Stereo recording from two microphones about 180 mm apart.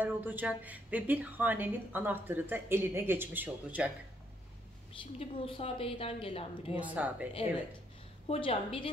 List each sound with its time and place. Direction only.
0.0 s speech: 10° right (ahead or behind)
5.2 s a woman's voice: 30° left (ahead or behind)
6.9 s speech: 10° right (ahead or behind)
8.3 s a woman's voice: 35° left (ahead or behind)